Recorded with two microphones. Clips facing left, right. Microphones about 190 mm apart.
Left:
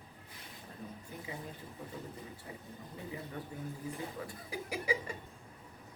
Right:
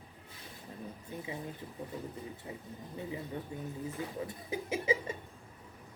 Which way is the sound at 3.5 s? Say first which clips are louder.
Right 2 dB; 20° right (ahead or behind).